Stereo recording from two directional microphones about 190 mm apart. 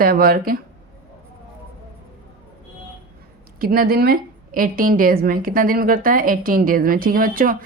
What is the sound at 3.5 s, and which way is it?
A woman's voice, 50° right (ahead or behind).